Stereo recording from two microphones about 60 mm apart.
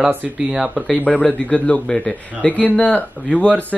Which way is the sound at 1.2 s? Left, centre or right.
Left.